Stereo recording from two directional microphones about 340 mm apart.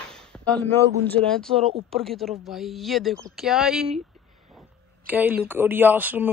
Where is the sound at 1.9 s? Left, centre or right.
Centre.